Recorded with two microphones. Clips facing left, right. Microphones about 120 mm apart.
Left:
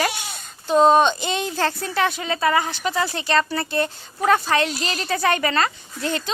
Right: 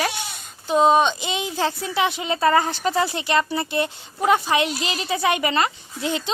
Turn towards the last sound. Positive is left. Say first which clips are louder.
# even
turn(degrees=-15)  # may be behind; listen again after turning